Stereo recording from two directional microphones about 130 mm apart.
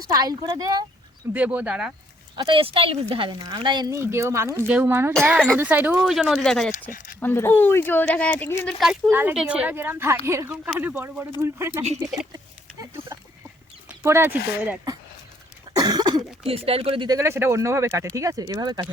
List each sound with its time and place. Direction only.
0.0 s speech: 30° right (ahead or behind)
1.3 s a woman's voice: 10° right (ahead or behind)
2.3 s speech: 40° right (ahead or behind)
3.9 s a woman's voice: 20° right (ahead or behind); by 6.7 s 5° left (ahead or behind)
6.9 s speech: 90° left
7.2 s speech: 15° left (ahead or behind)
9.0 s a woman's voice: 15° right (ahead or behind)
10.5 s a woman's voice: 10° right (ahead or behind); by 12.2 s 25° right (ahead or behind)
13.8 s speech: 20° right (ahead or behind)
15.7 s cough: 30° right (ahead or behind)
16.5 s speech: 45° right (ahead or behind)
17.1 s speech: 20° right (ahead or behind)